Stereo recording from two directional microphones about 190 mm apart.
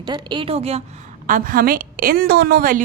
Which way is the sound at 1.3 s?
45° right (ahead or behind).